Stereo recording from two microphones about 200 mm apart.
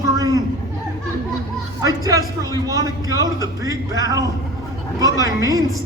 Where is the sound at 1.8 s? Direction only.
15° right (ahead or behind).